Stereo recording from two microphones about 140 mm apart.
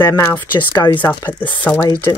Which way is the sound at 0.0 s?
20° left (ahead or behind).